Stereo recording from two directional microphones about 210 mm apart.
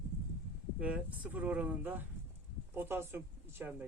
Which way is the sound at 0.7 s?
5° right (ahead or behind).